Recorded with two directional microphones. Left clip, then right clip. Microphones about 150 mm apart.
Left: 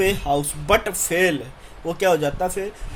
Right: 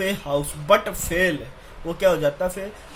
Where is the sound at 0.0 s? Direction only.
40° left (ahead or behind).